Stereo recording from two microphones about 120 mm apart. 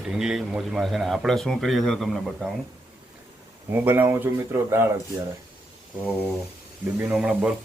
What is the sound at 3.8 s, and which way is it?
Speech, 15° right (ahead or behind).